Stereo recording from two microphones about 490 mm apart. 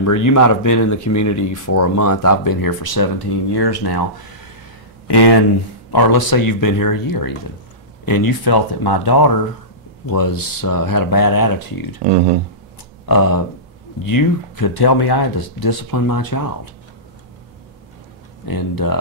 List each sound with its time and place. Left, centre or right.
0.0 s speech: left
13.0 s speech: left
18.4 s speech: left